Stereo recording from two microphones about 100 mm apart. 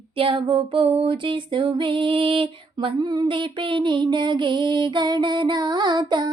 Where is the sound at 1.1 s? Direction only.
55° right (ahead or behind).